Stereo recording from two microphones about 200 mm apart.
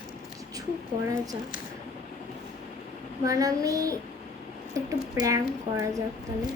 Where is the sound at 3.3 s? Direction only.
15° right (ahead or behind).